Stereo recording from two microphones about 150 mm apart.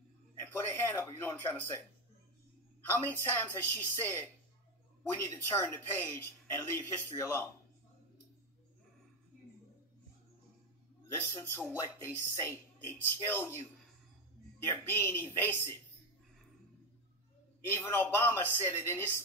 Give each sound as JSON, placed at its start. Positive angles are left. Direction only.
{"t": 0.5, "sound": "speech", "side_deg": 15}
{"t": 2.9, "sound": "speech", "side_deg": 15}
{"t": 11.3, "sound": "speech", "side_deg": 15}
{"t": 14.7, "sound": "speech", "side_deg": 15}
{"t": 17.7, "sound": "speech", "side_deg": 15}